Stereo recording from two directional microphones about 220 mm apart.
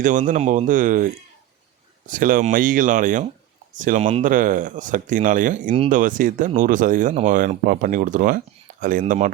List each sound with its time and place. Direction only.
0.0 s speech: 35° right (ahead or behind)